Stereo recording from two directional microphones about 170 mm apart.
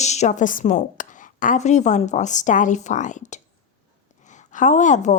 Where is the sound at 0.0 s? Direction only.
40° left (ahead or behind).